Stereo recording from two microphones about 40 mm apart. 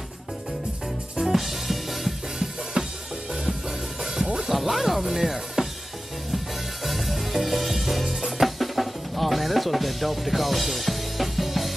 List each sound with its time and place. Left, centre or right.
1.2 s music: centre
2.8 s drum kit: right
4.0 s music: centre
4.4 s speech: centre
6.3 s music: centre
8.3 s drum kit: centre